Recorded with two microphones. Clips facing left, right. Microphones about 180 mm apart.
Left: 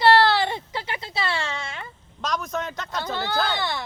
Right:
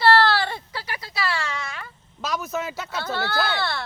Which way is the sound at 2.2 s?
5° right (ahead or behind).